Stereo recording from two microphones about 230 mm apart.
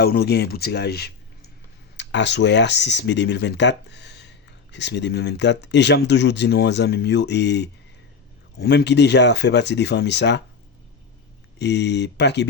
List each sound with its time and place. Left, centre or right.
0.0 s speech: left
11.6 s speech: left